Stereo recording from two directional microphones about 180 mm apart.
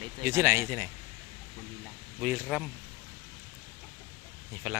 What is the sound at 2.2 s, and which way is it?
Speech, 5° right (ahead or behind).